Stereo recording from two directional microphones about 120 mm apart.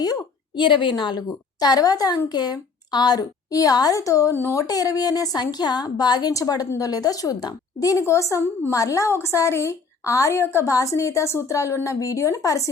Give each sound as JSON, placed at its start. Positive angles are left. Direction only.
{"t": 0.0, "sound": "a woman's voice", "side_deg": 35}
{"t": 4.6, "sound": "a woman's voice", "side_deg": 30}